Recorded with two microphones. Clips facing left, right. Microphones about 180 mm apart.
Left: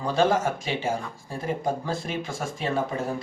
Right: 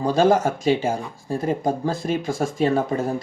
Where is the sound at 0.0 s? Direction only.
40° right (ahead or behind).